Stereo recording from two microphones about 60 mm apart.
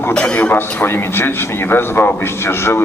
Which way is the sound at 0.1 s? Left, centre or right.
Centre.